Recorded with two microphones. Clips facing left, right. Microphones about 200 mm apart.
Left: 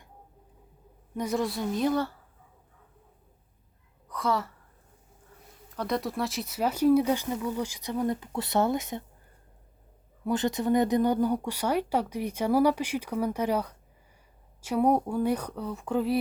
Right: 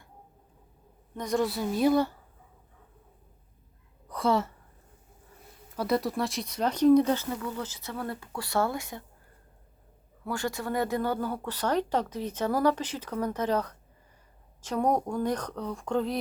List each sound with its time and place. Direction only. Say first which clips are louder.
1.1 s a woman's voice: right 1 dB; 5° left (ahead or behind); by 2.1 s 10° right (ahead or behind)
4.1 s speech: right 3 dB; 30° right (ahead or behind)
5.7 s speech: right 2 dB; 5° right (ahead or behind); by 9.0 s 20° left (ahead or behind)
10.2 s speech: left 6 dB; 20° left (ahead or behind)